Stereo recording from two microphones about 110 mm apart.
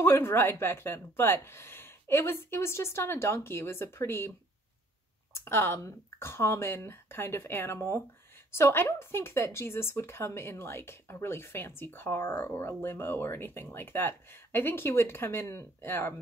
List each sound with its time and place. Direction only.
0.0 s speech: 20° left (ahead or behind)
5.3 s speech: 20° left (ahead or behind)